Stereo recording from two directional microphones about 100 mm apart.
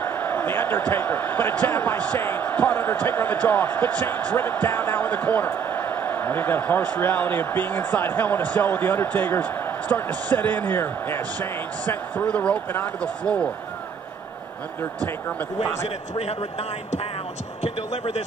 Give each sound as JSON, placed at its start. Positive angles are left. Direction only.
{"t": 0.0, "sound": "speech", "side_deg": 15}
{"t": 15.2, "sound": "speech", "side_deg": 20}
{"t": 17.6, "sound": "speech", "side_deg": 70}